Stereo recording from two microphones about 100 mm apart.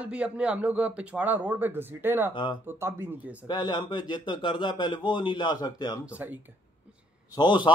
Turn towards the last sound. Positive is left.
turn(degrees=50)  # may be behind; listen again after turning